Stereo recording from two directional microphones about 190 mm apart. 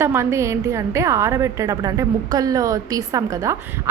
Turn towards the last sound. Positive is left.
turn(degrees=-15)  # may be behind; listen again after turning